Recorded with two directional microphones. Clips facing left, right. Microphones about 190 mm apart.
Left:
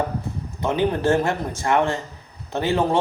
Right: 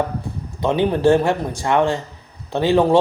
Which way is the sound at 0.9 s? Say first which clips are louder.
Right 6 dB; 15° right (ahead or behind).